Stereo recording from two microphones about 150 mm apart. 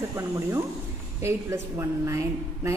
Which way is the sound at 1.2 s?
20° right (ahead or behind).